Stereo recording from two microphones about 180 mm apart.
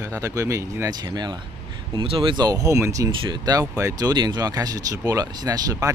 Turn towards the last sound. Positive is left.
turn(degrees=-20)  # may be behind; listen again after turning